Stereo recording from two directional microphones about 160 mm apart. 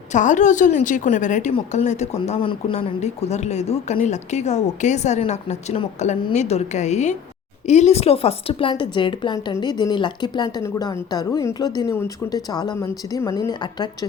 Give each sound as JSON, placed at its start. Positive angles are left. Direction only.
{"t": 0.1, "sound": "a woman's voice", "side_deg": 50}